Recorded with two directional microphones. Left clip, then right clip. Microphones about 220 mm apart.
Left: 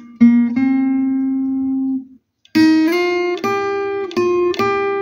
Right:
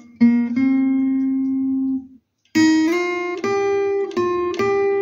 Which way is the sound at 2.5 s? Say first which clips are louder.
Left 3 dB; 35° left (ahead or behind).